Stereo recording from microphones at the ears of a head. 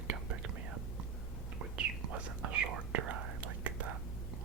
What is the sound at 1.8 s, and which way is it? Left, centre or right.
Whispering, right.